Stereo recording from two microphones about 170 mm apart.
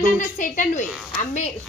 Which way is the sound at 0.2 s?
50° left (ahead or behind).